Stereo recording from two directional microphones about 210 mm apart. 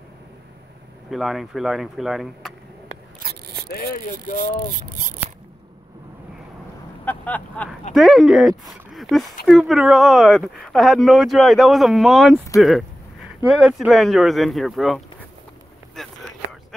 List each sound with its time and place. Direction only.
1.1 s speech: centre (ahead or behind)
3.2 s rub: 50° right (ahead or behind)
3.6 s speech: 45° left (ahead or behind)
7.1 s speech: 5° left (ahead or behind)
16.0 s a sound: centre (ahead or behind)